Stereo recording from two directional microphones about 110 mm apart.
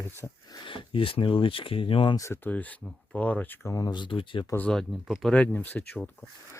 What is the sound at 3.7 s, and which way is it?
Speech, 35° left (ahead or behind).